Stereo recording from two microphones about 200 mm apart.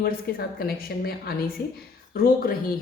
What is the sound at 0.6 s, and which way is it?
A woman's voice, 50° left (ahead or behind).